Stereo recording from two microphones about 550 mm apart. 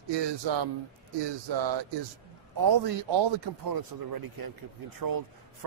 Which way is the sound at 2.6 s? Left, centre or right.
Right.